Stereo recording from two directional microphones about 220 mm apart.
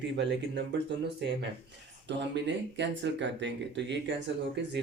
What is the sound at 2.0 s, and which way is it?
Speech, 50° right (ahead or behind).